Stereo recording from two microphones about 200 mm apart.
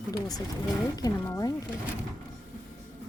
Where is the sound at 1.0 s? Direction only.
20° left (ahead or behind).